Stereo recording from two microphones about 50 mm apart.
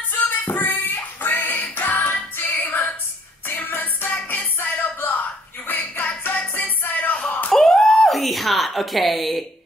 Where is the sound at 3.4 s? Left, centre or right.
Left.